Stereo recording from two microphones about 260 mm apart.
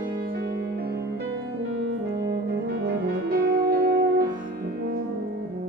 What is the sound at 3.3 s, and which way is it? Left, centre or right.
Music, right.